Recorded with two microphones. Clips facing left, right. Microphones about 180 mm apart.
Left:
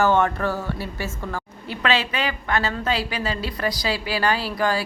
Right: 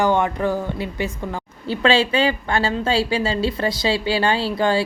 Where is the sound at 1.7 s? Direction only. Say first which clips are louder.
Right 6 dB; 30° right (ahead or behind).